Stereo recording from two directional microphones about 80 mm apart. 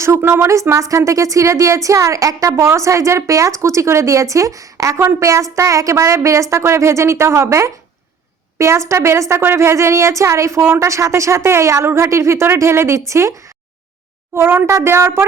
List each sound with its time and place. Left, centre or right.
0.0 s speech: right
14.3 s speech: right